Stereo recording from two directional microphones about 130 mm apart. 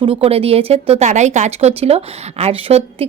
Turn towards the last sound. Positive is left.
turn(degrees=-55)  # may be behind; listen again after turning